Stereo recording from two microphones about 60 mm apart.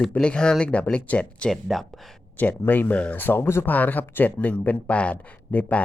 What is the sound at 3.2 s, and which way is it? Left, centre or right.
Speech, left.